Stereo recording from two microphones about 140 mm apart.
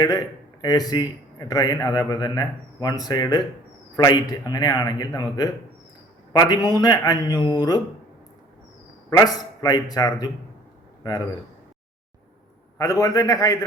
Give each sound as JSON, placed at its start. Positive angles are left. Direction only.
{"t": 0.0, "sound": "a man's voice", "side_deg": 25}
{"t": 9.0, "sound": "a man's voice", "side_deg": 25}
{"t": 12.8, "sound": "a man's voice", "side_deg": 25}